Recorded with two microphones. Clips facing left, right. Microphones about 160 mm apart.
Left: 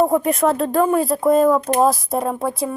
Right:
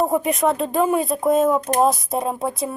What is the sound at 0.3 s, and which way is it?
Speech, centre (ahead or behind).